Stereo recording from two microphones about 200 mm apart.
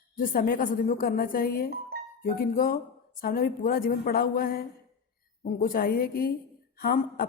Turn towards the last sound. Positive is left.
turn(degrees=50)  # may be behind; listen again after turning